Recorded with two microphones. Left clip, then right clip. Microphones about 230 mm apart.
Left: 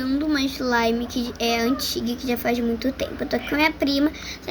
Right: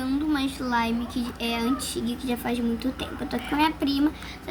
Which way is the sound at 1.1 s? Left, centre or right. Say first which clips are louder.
Left 6 dB; centre.